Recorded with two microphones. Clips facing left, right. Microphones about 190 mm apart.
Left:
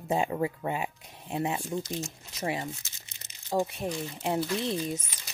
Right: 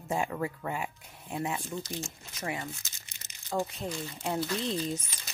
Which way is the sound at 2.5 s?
25° left (ahead or behind).